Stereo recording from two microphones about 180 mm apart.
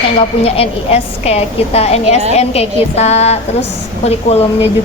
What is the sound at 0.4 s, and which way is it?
A woman's voice, 30° left (ahead or behind).